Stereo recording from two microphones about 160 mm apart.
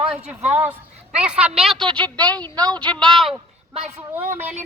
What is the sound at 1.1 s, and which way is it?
A woman's voice, 5° right (ahead or behind).